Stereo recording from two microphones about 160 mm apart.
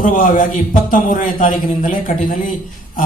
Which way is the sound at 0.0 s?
55° left (ahead or behind).